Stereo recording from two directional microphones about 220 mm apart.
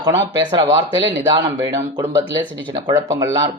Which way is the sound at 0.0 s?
15° right (ahead or behind).